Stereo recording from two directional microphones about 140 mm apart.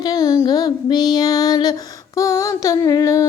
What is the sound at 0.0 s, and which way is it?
Female singing, 25° left (ahead or behind).